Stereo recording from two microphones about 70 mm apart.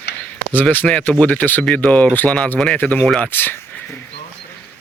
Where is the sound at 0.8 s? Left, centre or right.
Centre; by 3.6 s left.